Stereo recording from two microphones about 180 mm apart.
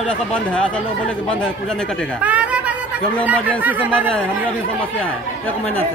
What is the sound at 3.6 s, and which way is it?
Speech, 10° right (ahead or behind).